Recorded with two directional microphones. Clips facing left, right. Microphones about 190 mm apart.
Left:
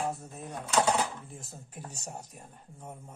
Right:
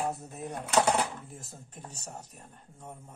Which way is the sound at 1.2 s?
Centre (ahead or behind).